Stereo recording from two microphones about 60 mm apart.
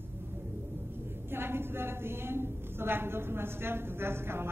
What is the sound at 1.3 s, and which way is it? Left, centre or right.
A woman's voice, right.